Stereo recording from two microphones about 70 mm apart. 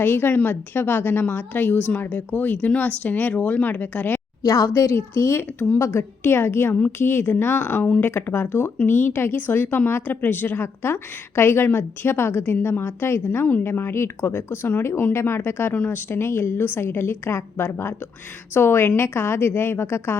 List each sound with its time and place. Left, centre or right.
0.0 s a woman's voice: left
4.4 s a woman's voice: left